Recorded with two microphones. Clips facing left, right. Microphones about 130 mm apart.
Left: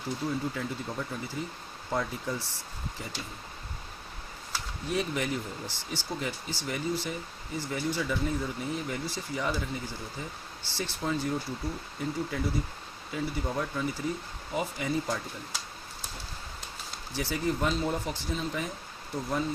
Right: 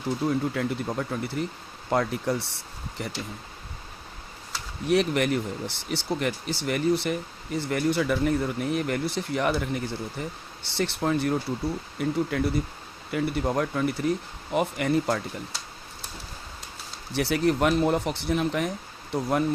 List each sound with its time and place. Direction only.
0.3 s speech: 65° right (ahead or behind)
4.9 s speech: 70° right (ahead or behind)
17.2 s speech: 75° right (ahead or behind)